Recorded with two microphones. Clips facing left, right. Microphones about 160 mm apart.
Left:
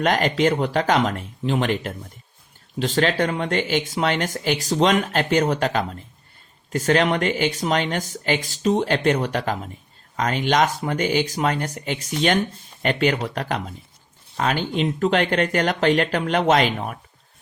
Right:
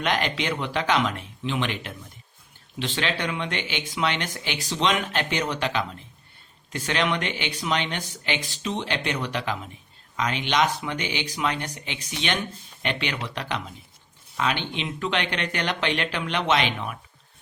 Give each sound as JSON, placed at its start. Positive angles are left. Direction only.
{"t": 0.0, "sound": "speech", "side_deg": 40}